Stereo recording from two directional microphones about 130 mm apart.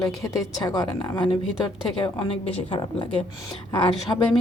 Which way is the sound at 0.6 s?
30° left (ahead or behind).